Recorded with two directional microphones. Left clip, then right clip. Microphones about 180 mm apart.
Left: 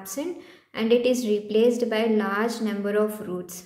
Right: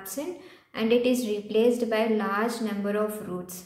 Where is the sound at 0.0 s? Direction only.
30° left (ahead or behind).